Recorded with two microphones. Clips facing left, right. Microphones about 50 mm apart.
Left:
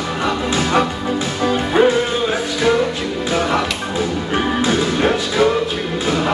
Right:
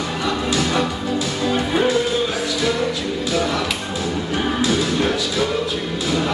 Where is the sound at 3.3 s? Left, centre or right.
Left.